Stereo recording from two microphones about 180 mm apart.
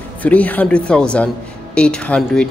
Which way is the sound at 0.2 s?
10° left (ahead or behind).